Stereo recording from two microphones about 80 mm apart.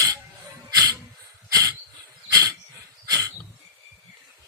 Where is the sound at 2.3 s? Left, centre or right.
Right.